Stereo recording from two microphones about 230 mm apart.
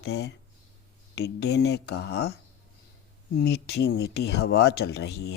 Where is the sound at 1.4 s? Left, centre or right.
Left.